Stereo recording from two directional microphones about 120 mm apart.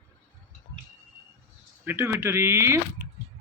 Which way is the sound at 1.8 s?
20° right (ahead or behind).